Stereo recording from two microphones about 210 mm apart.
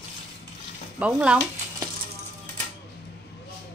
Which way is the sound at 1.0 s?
5° right (ahead or behind).